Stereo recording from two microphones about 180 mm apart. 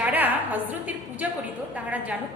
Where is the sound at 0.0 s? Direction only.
10° right (ahead or behind).